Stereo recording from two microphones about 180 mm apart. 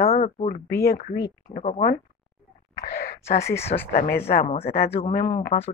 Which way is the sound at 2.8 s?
60° left (ahead or behind).